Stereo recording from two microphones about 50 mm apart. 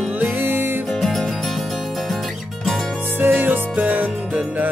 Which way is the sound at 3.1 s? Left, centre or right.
Right.